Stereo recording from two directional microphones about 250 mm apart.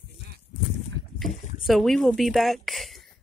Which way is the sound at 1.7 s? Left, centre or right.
Centre.